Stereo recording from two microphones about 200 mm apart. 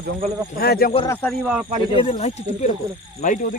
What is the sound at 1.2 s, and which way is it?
Speech, 5° right (ahead or behind).